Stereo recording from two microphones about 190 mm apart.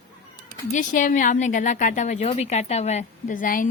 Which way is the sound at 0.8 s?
40° left (ahead or behind).